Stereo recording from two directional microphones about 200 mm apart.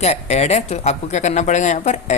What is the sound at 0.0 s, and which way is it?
A woman's voice, 35° left (ahead or behind).